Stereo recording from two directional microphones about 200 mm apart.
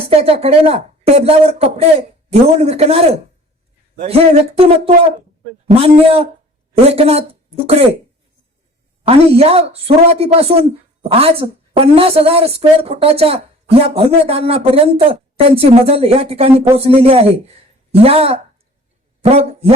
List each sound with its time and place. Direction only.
0.0 s a woman's voice: 30° right (ahead or behind)
9.0 s a woman's voice: 30° right (ahead or behind)